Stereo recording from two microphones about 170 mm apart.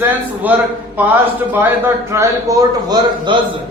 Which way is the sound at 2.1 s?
20° right (ahead or behind).